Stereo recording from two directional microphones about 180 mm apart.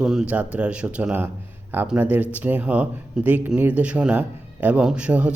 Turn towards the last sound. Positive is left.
turn(degrees=-5)  # may be behind; listen again after turning